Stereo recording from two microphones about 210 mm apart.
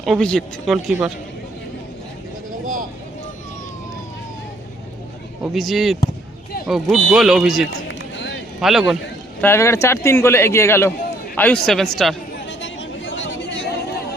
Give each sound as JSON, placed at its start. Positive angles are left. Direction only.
{"t": 0.0, "sound": "speech", "side_deg": 0}
{"t": 5.5, "sound": "speech", "side_deg": 0}
{"t": 7.7, "sound": "run", "side_deg": 60}
{"t": 8.6, "sound": "speech", "side_deg": 0}
{"t": 9.4, "sound": "speech", "side_deg": 10}
{"t": 12.5, "sound": "chatter", "side_deg": 60}